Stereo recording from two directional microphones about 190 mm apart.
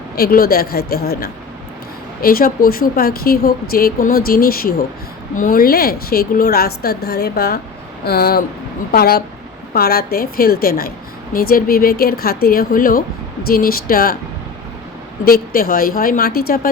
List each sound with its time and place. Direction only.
0.2 s speech: 50° left (ahead or behind)
15.2 s speech: 50° left (ahead or behind)